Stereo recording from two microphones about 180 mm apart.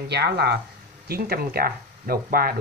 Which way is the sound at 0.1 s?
65° right (ahead or behind).